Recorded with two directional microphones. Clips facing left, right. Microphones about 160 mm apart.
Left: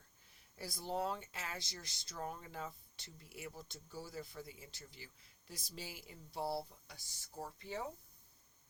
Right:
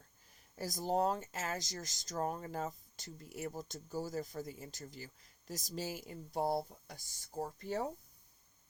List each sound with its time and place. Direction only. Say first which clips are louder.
0.5 s speech: right 7 dB; 45° right (ahead or behind)